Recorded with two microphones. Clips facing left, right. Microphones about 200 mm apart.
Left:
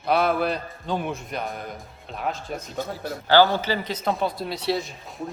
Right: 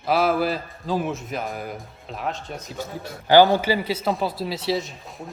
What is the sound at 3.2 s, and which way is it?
A man's voice, 15° right (ahead or behind).